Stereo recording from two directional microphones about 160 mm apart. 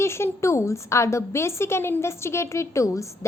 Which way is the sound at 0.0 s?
15° left (ahead or behind).